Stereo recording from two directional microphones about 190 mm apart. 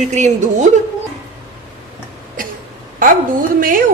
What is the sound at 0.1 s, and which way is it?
Speech, 40° right (ahead or behind).